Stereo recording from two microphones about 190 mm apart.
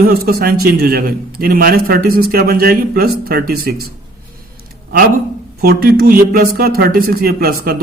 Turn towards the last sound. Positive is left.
turn(degrees=-55)  # may be behind; listen again after turning